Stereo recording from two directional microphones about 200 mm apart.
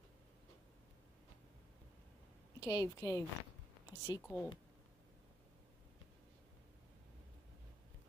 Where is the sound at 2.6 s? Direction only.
15° left (ahead or behind).